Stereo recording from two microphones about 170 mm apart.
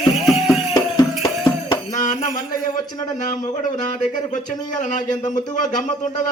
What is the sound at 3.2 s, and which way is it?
Speech, 45° left (ahead or behind).